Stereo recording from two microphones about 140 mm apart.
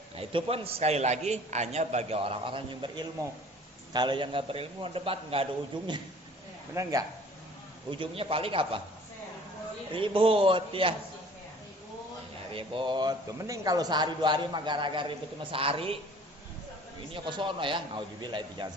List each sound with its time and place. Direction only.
0.2 s a man's voice: 45° right (ahead or behind)
7.9 s speech: 40° right (ahead or behind)
9.9 s speech: 40° right (ahead or behind)
12.5 s speech: 35° right (ahead or behind)
17.2 s speech: 35° right (ahead or behind)